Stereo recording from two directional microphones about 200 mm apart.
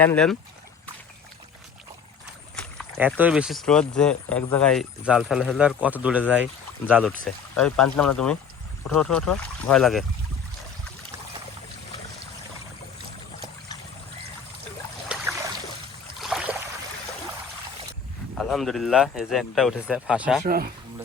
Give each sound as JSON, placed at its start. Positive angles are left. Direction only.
{"t": 0.0, "sound": "speech", "side_deg": 5}
{"t": 3.2, "sound": "speech", "side_deg": -5}
{"t": 15.1, "sound": "a sound", "side_deg": -5}
{"t": 16.2, "sound": "boat", "side_deg": -5}
{"t": 18.3, "sound": "speech", "side_deg": 0}
{"t": 20.4, "sound": "a man's voice", "side_deg": -45}